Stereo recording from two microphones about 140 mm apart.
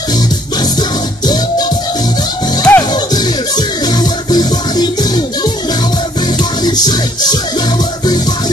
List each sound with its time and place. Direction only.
1.2 s music: 30° left (ahead or behind)
2.7 s music: 10° left (ahead or behind)
3.5 s music: 30° left (ahead or behind)
6.6 s music: 30° left (ahead or behind)